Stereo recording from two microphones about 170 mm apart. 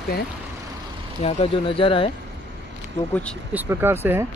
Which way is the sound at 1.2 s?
35° left (ahead or behind).